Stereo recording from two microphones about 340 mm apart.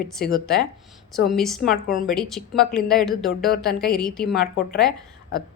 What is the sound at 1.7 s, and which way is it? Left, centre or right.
Speech, left.